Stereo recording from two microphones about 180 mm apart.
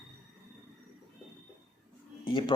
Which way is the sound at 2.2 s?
25° left (ahead or behind).